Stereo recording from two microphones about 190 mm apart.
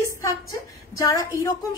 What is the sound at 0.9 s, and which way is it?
Speech, 15° left (ahead or behind).